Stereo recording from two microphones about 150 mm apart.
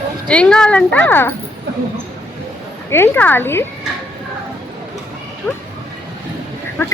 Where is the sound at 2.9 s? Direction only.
15° left (ahead or behind).